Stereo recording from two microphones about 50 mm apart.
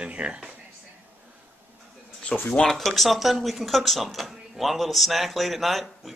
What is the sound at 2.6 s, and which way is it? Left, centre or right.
Speech, centre.